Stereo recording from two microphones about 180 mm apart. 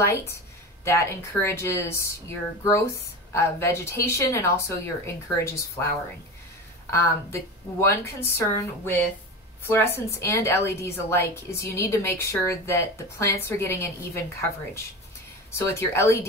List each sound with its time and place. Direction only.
0.0 s a woman's voice: 15° left (ahead or behind)
6.9 s a woman's voice: 15° left (ahead or behind)
15.5 s a woman's voice: 15° left (ahead or behind)